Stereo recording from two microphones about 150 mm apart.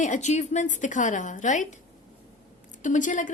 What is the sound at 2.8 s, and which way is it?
Speech, 55° left (ahead or behind).